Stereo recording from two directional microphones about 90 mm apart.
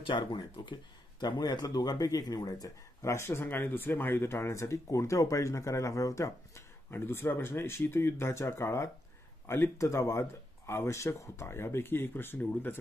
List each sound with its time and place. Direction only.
0.0 s speech: 65° left (ahead or behind); by 12.7 s 20° left (ahead or behind)